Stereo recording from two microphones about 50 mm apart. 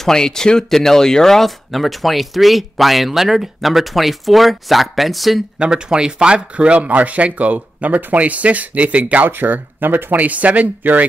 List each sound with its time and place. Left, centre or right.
0.0 s speech: centre
5.6 s speech: centre; by 11.1 s right